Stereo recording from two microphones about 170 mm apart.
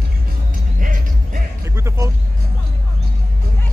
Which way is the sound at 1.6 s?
15° right (ahead or behind).